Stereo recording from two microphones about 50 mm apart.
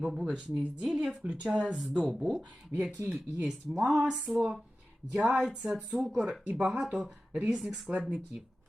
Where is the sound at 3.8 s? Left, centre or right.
Centre.